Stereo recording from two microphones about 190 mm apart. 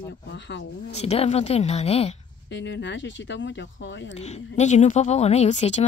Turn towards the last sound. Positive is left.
turn(degrees=35)  # may be behind; listen again after turning